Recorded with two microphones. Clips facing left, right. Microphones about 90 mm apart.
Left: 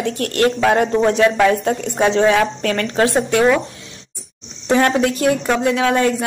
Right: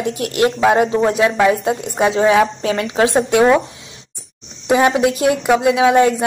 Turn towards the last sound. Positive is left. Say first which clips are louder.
# right 4 dB
turn(degrees=-20)  # may be behind; listen again after turning